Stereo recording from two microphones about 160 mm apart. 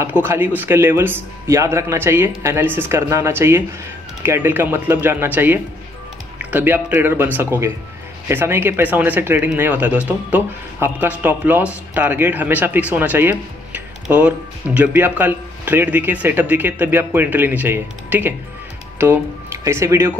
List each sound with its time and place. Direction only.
0.6 s speech: 15° right (ahead or behind)